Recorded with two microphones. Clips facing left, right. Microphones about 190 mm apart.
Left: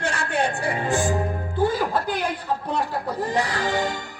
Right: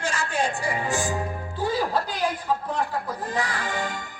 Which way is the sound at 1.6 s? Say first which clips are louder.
Left 3 dB; 55° left (ahead or behind).